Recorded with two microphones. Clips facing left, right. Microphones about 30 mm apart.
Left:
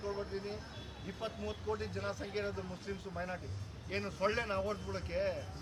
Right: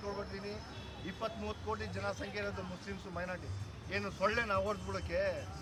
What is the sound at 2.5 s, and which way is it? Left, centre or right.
Speech, right.